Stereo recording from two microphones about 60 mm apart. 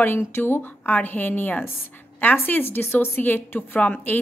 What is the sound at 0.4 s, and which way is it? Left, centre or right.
A woman's voice, left.